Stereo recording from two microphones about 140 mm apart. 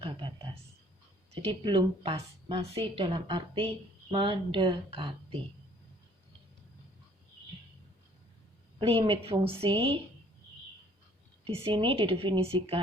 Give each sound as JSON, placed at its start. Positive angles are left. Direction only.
{"t": 1.3, "sound": "a woman's voice", "side_deg": -40}
{"t": 8.8, "sound": "a woman's voice", "side_deg": -40}
{"t": 11.4, "sound": "a woman's voice", "side_deg": -45}